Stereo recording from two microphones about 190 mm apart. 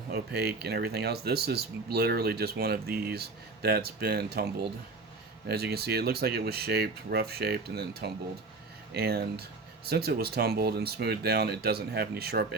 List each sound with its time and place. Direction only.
0.1 s speech: 60° right (ahead or behind)
5.5 s speech: 55° right (ahead or behind)